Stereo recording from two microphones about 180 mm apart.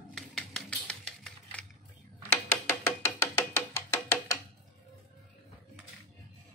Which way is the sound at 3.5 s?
15° left (ahead or behind).